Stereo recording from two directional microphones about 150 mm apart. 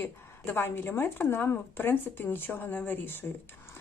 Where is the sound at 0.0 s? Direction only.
15° left (ahead or behind).